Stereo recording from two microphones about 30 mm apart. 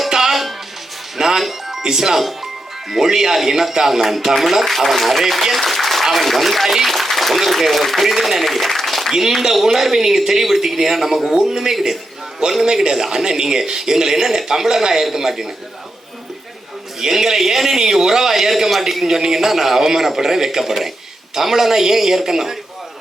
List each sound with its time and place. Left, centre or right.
0.1 s music: centre
1.1 s music: centre
1.4 s music: centre
1.8 s speech: centre
4.6 s a man's voice: centre
9.6 s speech: centre
17.0 s speech: centre